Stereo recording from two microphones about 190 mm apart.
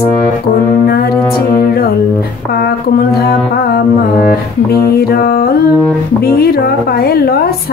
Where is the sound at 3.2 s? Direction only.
55° left (ahead or behind).